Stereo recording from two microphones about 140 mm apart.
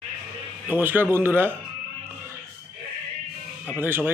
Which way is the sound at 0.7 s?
15° right (ahead or behind).